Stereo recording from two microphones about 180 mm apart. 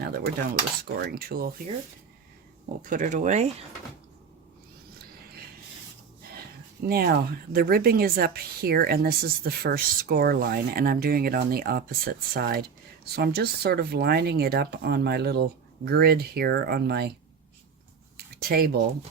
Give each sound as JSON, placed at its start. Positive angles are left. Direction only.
{"t": 0.0, "sound": "cutlery", "side_deg": -60}
{"t": 0.9, "sound": "a woman's voice", "side_deg": -55}
{"t": 2.9, "sound": "speech", "side_deg": -45}
{"t": 6.8, "sound": "a woman's voice", "side_deg": -55}
{"t": 18.4, "sound": "a woman's voice", "side_deg": -60}